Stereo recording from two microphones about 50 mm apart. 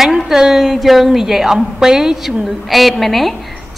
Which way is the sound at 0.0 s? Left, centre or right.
Centre.